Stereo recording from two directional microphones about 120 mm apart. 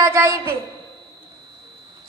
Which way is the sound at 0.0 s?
20° right (ahead or behind).